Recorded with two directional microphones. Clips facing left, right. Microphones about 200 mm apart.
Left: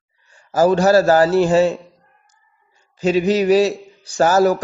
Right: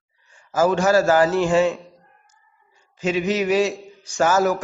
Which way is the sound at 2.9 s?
35° left (ahead or behind).